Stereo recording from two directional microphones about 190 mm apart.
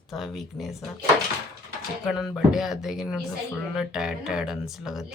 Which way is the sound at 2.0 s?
Centre (ahead or behind).